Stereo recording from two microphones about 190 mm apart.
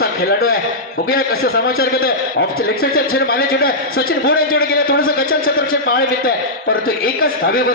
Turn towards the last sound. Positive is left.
turn(degrees=50)  # may be behind; listen again after turning